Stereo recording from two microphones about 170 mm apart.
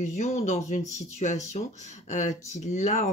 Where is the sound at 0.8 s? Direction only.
20° left (ahead or behind).